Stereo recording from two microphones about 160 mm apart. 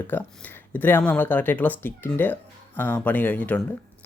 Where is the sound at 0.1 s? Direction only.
10° left (ahead or behind).